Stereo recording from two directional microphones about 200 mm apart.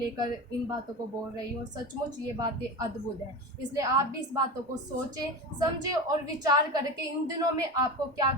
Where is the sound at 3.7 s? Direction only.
15° right (ahead or behind).